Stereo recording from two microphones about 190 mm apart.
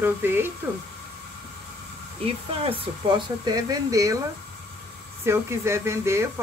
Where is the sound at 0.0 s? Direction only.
10° right (ahead or behind).